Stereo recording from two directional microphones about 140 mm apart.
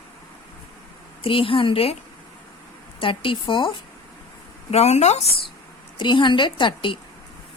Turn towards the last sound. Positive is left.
turn(degrees=35)  # may be behind; listen again after turning